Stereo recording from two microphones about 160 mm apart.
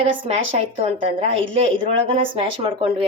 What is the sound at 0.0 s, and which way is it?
A woman's voice, 35° right (ahead or behind).